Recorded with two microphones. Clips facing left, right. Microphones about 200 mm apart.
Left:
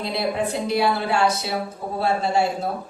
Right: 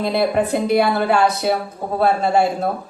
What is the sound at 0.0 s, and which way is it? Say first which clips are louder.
A woman's voice: right 6 dB; 55° right (ahead or behind).